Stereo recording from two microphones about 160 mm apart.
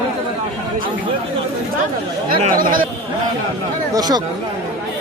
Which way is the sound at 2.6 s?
60° right (ahead or behind).